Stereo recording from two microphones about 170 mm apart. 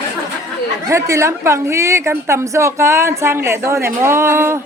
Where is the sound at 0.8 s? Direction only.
20° right (ahead or behind).